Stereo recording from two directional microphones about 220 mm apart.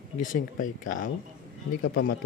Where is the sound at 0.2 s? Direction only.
35° left (ahead or behind).